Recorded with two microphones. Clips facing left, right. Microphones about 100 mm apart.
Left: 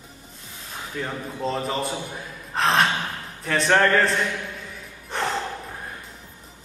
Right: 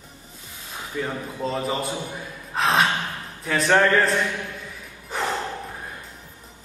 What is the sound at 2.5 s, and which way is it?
Gasp, centre (ahead or behind).